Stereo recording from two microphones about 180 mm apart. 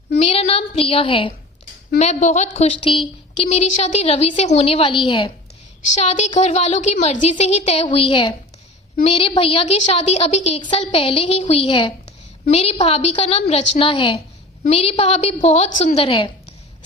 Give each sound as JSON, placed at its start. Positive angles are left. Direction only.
{"t": 0.1, "sound": "a woman's voice", "side_deg": 35}